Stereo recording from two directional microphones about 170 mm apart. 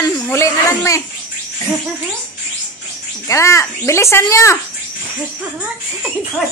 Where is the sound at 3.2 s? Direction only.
15° left (ahead or behind).